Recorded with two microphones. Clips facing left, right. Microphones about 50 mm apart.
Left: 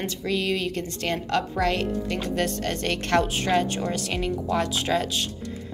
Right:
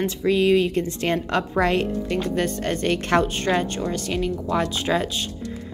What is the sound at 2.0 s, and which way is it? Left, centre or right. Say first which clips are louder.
Speech: right 3 dB; centre.